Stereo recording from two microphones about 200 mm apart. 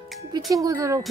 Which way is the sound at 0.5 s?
15° right (ahead or behind).